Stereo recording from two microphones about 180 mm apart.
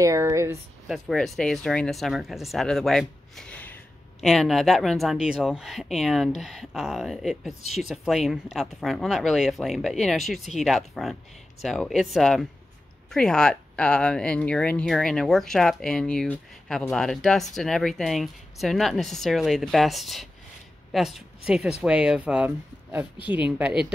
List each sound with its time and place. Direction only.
0.0 s speech: 15° right (ahead or behind)
0.8 s speech: centre (ahead or behind)